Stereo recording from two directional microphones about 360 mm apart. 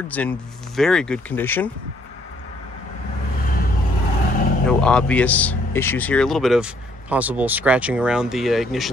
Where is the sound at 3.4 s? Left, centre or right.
Left.